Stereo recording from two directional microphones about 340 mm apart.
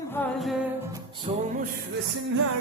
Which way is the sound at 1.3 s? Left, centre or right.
Centre.